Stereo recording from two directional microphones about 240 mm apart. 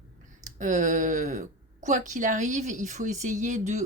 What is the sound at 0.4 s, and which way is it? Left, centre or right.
A woman's voice, right.